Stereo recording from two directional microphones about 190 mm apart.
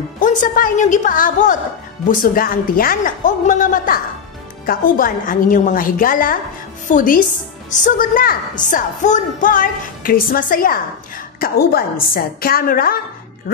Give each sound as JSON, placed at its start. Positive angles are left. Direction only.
{"t": 0.2, "sound": "a woman's voice", "side_deg": 45}